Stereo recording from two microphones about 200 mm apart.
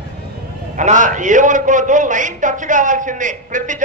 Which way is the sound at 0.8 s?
40° right (ahead or behind).